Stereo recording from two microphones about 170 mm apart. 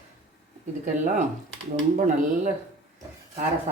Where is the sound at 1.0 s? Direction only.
50° right (ahead or behind).